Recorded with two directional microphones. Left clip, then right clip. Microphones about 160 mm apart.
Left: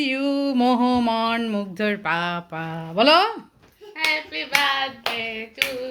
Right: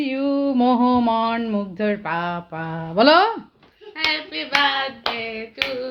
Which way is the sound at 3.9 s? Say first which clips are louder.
Even; 70° right (ahead or behind).